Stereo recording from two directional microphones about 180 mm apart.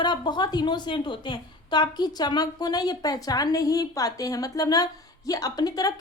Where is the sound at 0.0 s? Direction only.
25° left (ahead or behind).